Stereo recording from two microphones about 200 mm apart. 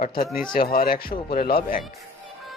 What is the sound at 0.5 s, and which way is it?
A man's voice, 45° left (ahead or behind).